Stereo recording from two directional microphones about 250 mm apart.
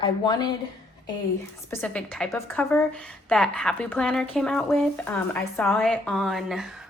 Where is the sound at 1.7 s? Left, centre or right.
Centre.